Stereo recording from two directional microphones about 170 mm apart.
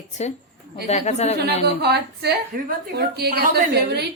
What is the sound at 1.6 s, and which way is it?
A woman's voice, 75° right (ahead or behind).